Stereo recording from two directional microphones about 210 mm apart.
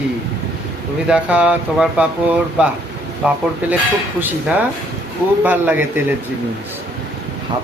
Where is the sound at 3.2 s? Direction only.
5° right (ahead or behind).